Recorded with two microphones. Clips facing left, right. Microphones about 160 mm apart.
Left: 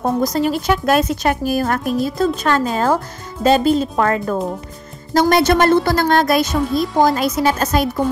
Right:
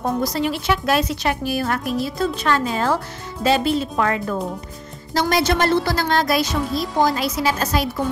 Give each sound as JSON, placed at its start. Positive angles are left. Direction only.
{"t": 0.0, "sound": "a woman's voice", "side_deg": 45}